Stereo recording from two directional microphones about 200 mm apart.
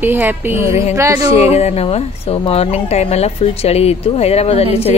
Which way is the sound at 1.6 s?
30° left (ahead or behind).